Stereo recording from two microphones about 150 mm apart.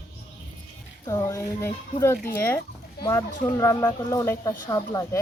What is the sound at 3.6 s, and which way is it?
Speech, 15° left (ahead or behind).